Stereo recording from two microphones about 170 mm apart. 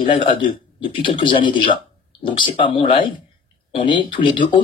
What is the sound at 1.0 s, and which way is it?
Speech, 30° left (ahead or behind).